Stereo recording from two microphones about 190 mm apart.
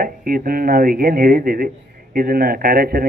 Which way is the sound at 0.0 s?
50° right (ahead or behind).